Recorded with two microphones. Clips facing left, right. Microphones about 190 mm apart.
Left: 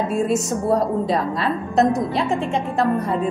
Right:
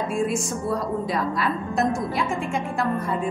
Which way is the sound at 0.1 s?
40° left (ahead or behind).